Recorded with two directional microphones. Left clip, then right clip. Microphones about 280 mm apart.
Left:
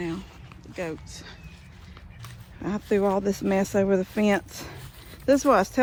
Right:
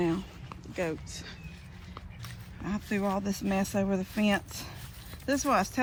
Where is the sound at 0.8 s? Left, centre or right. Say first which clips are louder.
Even; centre.